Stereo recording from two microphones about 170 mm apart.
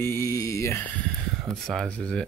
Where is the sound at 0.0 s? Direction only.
15° left (ahead or behind).